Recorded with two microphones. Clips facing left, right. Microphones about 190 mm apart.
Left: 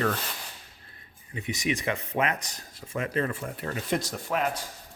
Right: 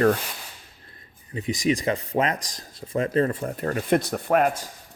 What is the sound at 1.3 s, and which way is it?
Speech, 35° right (ahead or behind).